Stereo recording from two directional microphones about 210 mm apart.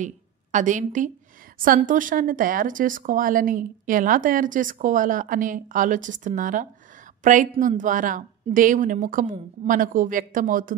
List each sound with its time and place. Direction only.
0.0 s a woman's voice: 35° right (ahead or behind)